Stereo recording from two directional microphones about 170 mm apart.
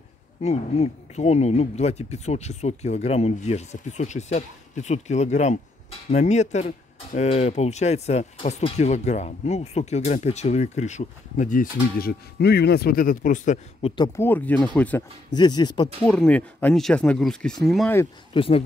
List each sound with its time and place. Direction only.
0.4 s speech: 40° left (ahead or behind)
13.8 s speech: 25° left (ahead or behind); by 15.0 s 10° left (ahead or behind)
15.3 s speech: 25° left (ahead or behind)
16.1 s speech: 5° left (ahead or behind)
18.3 s speech: 30° left (ahead or behind)